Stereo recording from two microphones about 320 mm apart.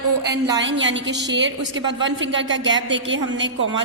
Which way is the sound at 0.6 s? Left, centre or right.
Right.